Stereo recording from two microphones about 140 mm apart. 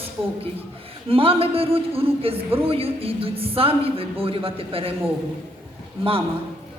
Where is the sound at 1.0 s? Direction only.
40° right (ahead or behind).